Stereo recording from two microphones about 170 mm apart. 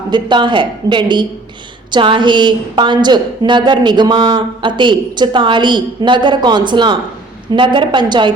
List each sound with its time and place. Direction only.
0.1 s a woman's voice: 30° right (ahead or behind)